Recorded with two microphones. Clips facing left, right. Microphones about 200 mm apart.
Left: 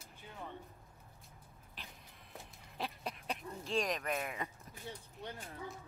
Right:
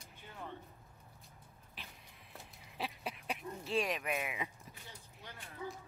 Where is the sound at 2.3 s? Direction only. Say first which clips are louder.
Left 1 dB; centre (ahead or behind).